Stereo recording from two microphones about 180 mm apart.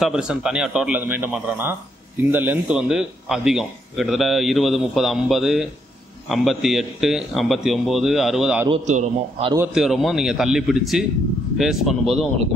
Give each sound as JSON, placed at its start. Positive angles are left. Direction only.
{"t": 0.0, "sound": "a man's voice", "side_deg": -5}
{"t": 8.6, "sound": "a man's voice", "side_deg": -35}
{"t": 9.8, "sound": "a man's voice", "side_deg": 0}